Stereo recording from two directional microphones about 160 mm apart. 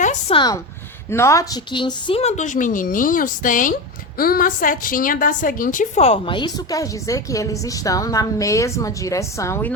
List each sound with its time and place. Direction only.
0.0 s a sound: 50° left (ahead or behind)
0.3 s a woman's voice: 25° left (ahead or behind)
1.7 s a woman's voice: 30° left (ahead or behind); by 9.7 s 15° left (ahead or behind)